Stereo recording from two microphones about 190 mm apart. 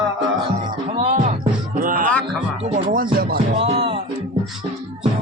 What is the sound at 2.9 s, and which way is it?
Music, 50° right (ahead or behind).